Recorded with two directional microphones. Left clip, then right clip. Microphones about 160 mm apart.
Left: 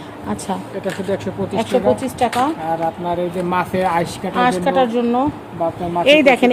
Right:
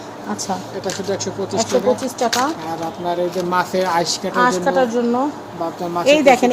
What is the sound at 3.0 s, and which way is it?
Speech, 45° left (ahead or behind).